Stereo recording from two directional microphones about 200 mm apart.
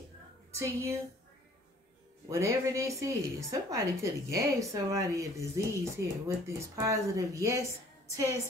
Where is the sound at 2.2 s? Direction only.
15° right (ahead or behind).